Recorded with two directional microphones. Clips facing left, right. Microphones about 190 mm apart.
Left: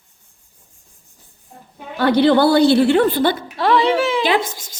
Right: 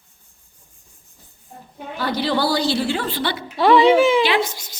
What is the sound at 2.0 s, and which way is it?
A woman's voice, 60° left (ahead or behind).